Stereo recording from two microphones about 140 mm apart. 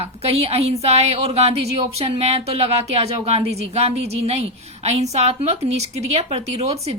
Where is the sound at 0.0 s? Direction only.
45° right (ahead or behind).